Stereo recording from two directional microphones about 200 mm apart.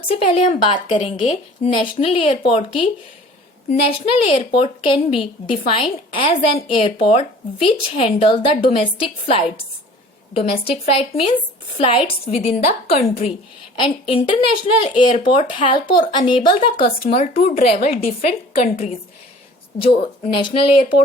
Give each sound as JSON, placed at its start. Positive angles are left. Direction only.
{"t": 0.1, "sound": "a woman's voice", "side_deg": 30}